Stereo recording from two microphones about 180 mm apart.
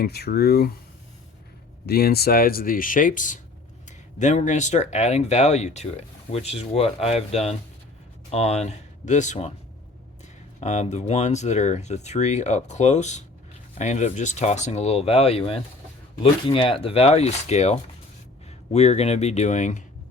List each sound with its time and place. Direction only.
0.0 s speech: 60° left (ahead or behind)
1.9 s speech: 60° left (ahead or behind); by 9.5 s 40° left (ahead or behind)
10.6 s speech: 40° left (ahead or behind)